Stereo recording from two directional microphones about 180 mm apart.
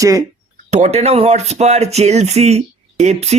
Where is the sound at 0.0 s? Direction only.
20° right (ahead or behind).